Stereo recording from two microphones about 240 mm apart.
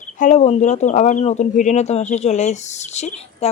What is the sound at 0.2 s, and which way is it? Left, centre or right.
Speech, left.